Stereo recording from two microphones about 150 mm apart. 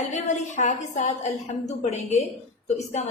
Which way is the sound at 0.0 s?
50° left (ahead or behind).